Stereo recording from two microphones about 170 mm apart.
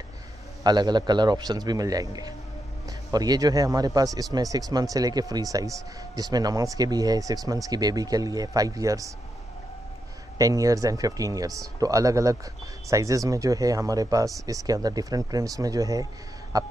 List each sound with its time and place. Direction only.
0.7 s speech: 25° right (ahead or behind)
10.3 s speech: 20° right (ahead or behind)